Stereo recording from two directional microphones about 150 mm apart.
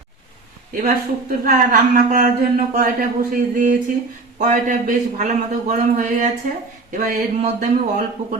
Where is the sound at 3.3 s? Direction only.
65° right (ahead or behind).